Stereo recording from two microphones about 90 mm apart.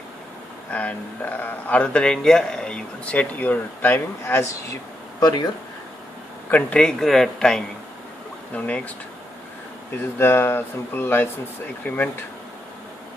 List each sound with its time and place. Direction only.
0.7 s speech: 15° left (ahead or behind)
6.5 s speech: 10° left (ahead or behind)
10.0 s speech: 25° left (ahead or behind)